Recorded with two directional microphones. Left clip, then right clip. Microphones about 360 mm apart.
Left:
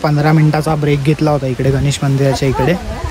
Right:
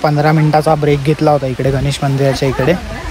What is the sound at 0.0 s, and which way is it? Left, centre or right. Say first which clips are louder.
Speech: right 2 dB; centre.